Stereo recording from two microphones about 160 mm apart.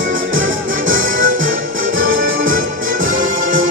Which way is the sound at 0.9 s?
55° right (ahead or behind).